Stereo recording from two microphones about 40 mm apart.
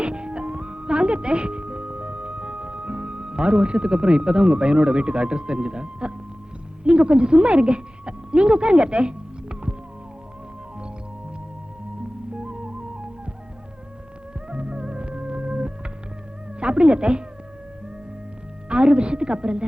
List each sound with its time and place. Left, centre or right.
0.0 s music: right
6.8 s speech: right
12.3 s music: right
14.5 s music: right
16.6 s speech: right
18.7 s a sound: right